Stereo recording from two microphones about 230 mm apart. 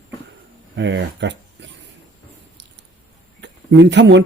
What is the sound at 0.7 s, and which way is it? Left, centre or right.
Speech, right.